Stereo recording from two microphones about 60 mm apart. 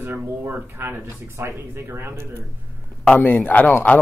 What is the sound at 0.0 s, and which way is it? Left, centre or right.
Speech, right.